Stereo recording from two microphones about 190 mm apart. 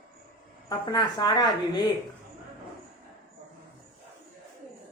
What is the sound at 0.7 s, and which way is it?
Speech, 20° left (ahead or behind).